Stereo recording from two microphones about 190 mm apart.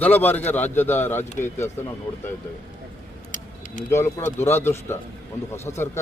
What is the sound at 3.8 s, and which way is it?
A man's voice, 15° left (ahead or behind).